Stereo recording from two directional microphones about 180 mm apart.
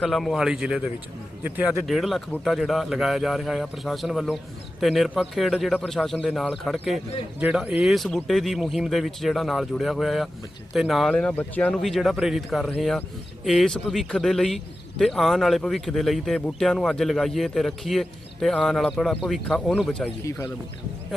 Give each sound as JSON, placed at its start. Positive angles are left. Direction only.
{"t": 0.0, "sound": "speech", "side_deg": 0}